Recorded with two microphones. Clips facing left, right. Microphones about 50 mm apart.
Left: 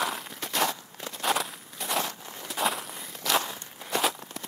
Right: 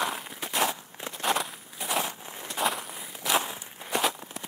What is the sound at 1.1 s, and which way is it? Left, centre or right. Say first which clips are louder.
Walk: even; centre.